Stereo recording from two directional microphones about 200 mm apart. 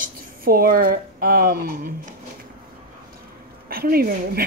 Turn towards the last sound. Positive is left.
turn(degrees=-50)  # may be behind; listen again after turning